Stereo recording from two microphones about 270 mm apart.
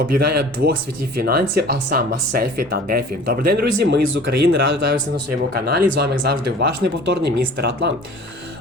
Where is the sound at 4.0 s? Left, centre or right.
Right.